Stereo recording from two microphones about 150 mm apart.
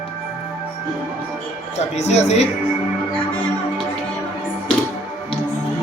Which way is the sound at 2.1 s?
50° left (ahead or behind).